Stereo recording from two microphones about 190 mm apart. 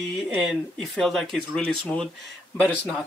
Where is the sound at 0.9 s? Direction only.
Centre (ahead or behind).